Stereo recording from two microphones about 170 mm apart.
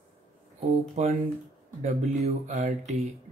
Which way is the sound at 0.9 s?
40° right (ahead or behind).